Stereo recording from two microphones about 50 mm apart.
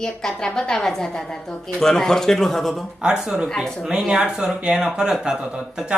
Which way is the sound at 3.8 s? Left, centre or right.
Centre.